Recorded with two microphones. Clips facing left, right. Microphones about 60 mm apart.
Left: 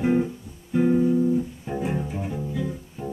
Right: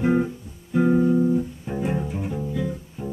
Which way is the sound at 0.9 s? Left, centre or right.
Right.